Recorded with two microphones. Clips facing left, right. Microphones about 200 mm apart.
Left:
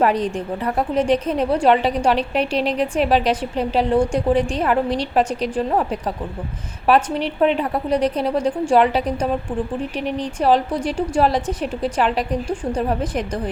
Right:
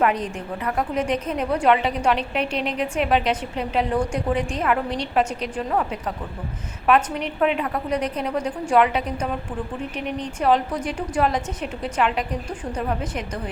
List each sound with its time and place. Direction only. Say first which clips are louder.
0.0 s a woman's voice: left 4 dB; 35° left (ahead or behind)